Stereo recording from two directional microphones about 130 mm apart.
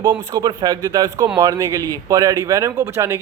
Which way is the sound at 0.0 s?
35° right (ahead or behind).